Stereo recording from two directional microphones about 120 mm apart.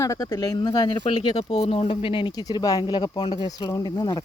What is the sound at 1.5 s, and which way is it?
Speech, 60° left (ahead or behind).